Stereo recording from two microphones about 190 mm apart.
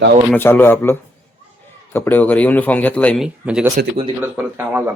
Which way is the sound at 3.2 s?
5° right (ahead or behind).